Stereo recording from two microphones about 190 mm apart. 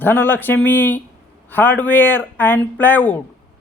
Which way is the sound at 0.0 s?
10° left (ahead or behind).